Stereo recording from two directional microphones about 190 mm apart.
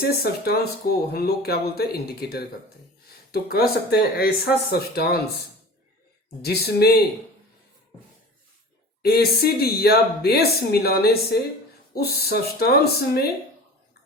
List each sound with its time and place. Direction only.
0.0 s speech: 55° left (ahead or behind)
6.4 s speech: 55° left (ahead or behind)
9.0 s speech: 55° left (ahead or behind)